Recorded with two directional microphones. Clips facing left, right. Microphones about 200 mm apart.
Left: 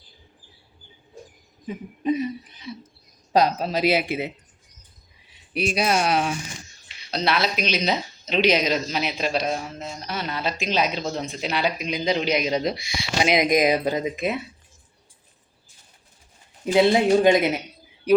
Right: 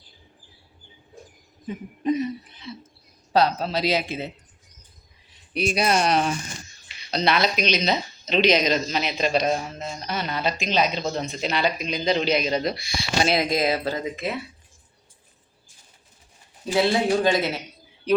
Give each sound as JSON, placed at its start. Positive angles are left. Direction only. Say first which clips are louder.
{"t": 1.6, "sound": "speech", "louder": "even", "side_deg": 10}
{"t": 5.5, "sound": "speech", "louder": "even", "side_deg": 0}
{"t": 16.7, "sound": "speech", "louder": "left 4 dB", "side_deg": 20}